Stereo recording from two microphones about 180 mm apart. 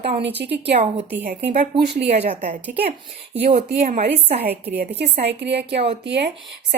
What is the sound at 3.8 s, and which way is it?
Speech, 40° right (ahead or behind).